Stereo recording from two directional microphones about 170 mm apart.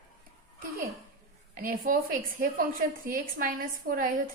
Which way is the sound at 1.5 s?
50° right (ahead or behind).